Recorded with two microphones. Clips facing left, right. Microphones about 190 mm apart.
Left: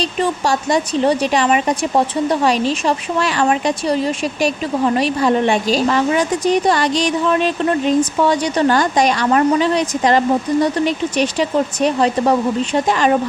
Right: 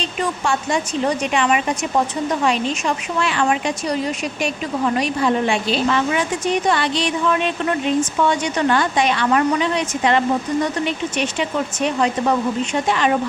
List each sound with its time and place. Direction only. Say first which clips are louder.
0.0 s speech: left 4 dB; 40° left (ahead or behind)